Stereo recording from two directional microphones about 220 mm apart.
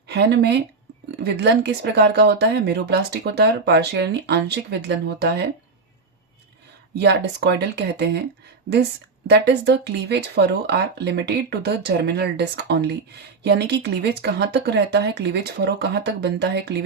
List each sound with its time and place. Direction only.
0.1 s speech: 50° right (ahead or behind)
6.9 s speech: 50° right (ahead or behind)